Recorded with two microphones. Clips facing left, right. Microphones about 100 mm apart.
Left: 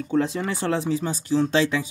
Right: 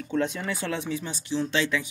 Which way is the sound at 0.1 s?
30° left (ahead or behind).